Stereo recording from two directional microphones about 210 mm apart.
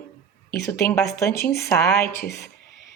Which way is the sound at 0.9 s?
15° left (ahead or behind).